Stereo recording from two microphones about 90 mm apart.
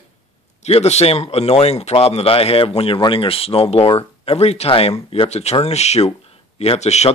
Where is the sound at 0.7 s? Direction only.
90° left.